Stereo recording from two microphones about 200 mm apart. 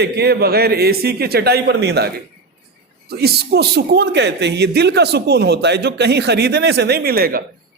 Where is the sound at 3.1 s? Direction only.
55° right (ahead or behind).